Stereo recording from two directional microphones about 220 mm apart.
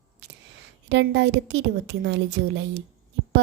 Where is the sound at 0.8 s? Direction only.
50° right (ahead or behind).